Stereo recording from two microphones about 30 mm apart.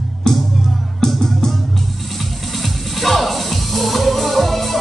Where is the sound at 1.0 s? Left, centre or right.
Centre.